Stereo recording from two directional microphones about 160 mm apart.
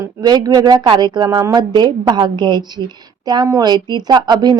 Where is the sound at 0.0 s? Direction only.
25° right (ahead or behind).